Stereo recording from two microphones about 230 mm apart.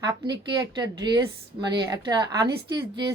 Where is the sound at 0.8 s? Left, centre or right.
Centre.